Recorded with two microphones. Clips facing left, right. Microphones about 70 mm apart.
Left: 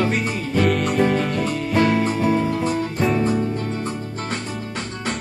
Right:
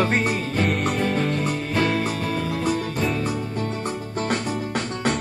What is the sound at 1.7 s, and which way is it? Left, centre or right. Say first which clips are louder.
Music: left 5 dB; left.